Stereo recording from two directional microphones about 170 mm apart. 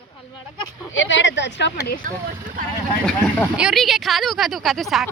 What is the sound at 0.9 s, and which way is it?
Speech, 90° left.